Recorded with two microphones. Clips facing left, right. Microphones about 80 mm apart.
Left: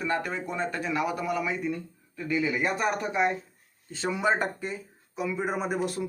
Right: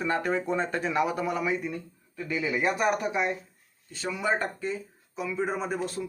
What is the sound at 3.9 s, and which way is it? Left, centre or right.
Speech, left.